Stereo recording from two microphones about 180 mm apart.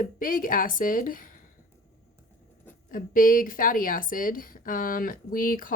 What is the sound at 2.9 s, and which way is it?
Speech, 50° left (ahead or behind).